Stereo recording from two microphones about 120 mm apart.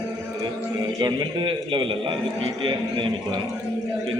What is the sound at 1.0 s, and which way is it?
A man's voice, 40° right (ahead or behind).